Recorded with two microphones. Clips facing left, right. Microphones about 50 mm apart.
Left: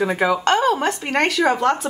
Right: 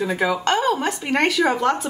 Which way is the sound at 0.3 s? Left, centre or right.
Centre.